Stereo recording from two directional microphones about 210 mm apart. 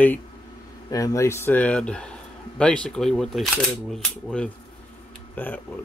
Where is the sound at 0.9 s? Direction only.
15° left (ahead or behind).